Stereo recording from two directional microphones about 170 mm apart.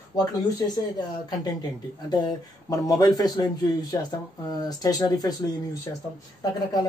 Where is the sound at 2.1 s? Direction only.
25° left (ahead or behind).